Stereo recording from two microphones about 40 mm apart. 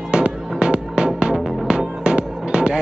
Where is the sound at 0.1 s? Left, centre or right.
Right.